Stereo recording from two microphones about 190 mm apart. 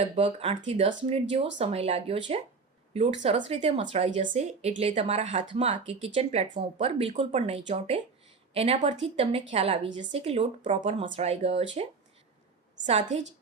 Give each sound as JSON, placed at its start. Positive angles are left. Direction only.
{"t": 0.2, "sound": "speech", "side_deg": -30}
{"t": 12.8, "sound": "speech", "side_deg": -40}